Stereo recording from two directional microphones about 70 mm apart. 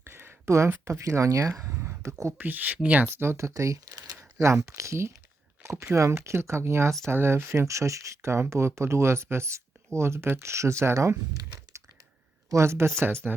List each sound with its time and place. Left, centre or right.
0.0 s a sound: right
0.9 s speech: right
1.8 s a sound: right
2.4 s speech: right
3.2 s speech: right
4.2 s speech: right
13.2 s speech: right